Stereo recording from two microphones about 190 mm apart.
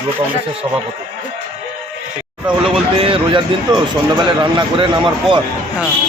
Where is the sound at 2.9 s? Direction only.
30° right (ahead or behind).